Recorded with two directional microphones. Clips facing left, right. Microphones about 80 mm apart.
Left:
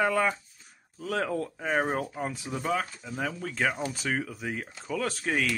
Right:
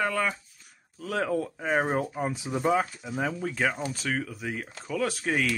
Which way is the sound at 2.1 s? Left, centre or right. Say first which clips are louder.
Right 3 dB; centre.